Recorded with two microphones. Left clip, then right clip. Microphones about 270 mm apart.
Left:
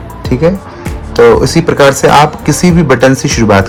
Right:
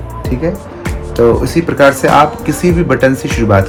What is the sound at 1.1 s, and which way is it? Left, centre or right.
Speech, left.